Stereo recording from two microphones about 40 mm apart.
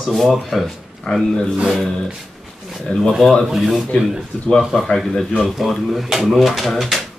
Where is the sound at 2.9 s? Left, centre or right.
Left.